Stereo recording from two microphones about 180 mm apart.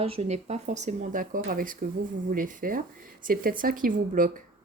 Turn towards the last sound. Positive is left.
turn(degrees=-50)  # may be behind; listen again after turning